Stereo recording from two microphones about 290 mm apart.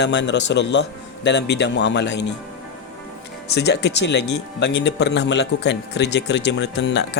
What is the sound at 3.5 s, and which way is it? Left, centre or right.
Speech, left.